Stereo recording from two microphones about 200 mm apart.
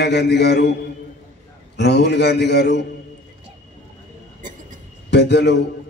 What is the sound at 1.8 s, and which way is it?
A man's voice, 60° left (ahead or behind).